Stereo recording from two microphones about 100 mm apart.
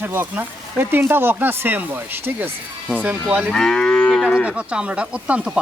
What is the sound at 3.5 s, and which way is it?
Moo, 5° left (ahead or behind).